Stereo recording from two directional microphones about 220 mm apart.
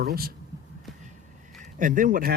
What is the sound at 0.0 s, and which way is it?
Speech, 45° right (ahead or behind).